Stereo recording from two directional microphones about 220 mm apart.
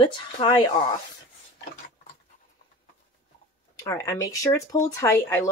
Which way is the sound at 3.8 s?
15° left (ahead or behind).